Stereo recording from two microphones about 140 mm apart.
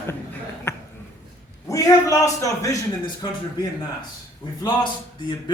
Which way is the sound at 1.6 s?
25° left (ahead or behind).